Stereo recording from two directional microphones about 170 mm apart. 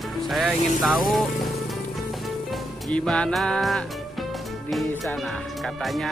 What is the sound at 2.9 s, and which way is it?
Speech, 5° left (ahead or behind).